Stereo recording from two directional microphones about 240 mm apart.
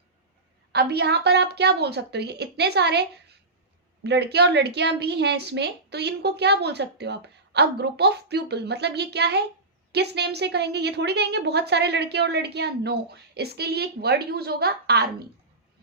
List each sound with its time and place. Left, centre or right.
0.7 s a woman's voice: right